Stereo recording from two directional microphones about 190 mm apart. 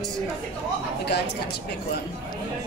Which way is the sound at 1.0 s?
60° left (ahead or behind).